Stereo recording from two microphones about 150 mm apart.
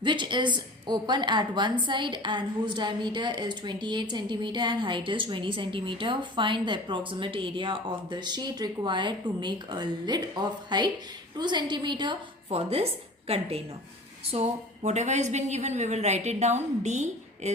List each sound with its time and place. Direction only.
0.0 s a woman's voice: 30° right (ahead or behind)
12.5 s a woman's voice: 45° right (ahead or behind)